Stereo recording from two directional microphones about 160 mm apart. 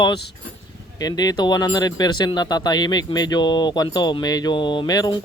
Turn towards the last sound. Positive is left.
turn(degrees=25)  # may be behind; listen again after turning